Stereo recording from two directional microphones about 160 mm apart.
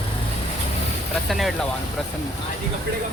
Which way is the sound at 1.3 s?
Centre (ahead or behind).